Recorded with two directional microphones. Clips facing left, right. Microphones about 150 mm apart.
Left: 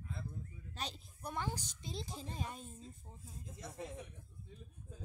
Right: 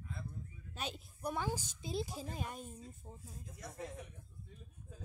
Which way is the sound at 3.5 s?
25° left (ahead or behind).